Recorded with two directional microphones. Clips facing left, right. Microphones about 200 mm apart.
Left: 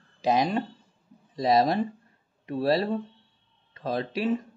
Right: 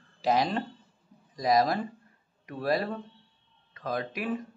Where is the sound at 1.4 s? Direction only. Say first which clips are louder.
Left 3 dB; 30° left (ahead or behind).